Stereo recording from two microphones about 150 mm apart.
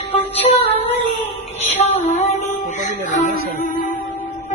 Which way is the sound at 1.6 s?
45° left (ahead or behind).